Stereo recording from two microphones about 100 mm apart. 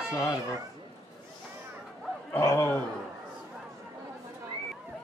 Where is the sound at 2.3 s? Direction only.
25° left (ahead or behind).